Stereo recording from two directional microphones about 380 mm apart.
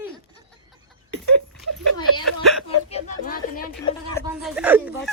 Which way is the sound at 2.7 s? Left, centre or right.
Centre.